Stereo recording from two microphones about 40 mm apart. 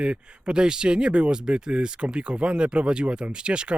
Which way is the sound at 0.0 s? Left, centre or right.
Right.